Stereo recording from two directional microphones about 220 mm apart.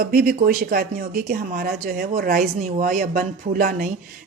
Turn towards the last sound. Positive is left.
turn(degrees=-40)  # may be behind; listen again after turning